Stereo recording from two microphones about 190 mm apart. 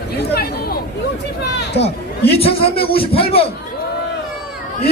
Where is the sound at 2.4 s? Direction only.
30° left (ahead or behind).